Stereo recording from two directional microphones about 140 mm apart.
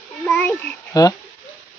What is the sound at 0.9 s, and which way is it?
Speech, 25° left (ahead or behind).